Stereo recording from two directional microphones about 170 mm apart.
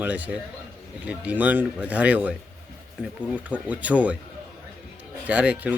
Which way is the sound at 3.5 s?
10° right (ahead or behind).